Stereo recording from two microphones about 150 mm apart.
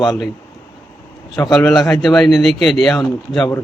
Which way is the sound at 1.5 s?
Centre (ahead or behind).